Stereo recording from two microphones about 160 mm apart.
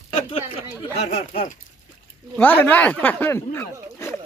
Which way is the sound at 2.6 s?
10° left (ahead or behind).